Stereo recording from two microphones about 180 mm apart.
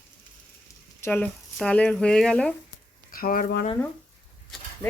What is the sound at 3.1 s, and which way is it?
Speech, 55° left (ahead or behind).